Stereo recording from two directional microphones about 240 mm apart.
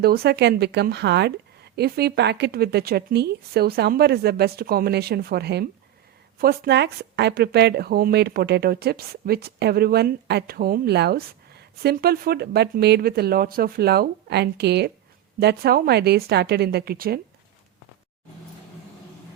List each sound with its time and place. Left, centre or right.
0.0 s a woman's voice: right